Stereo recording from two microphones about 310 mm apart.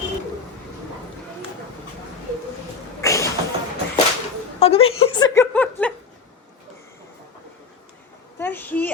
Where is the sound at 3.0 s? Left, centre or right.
Centre.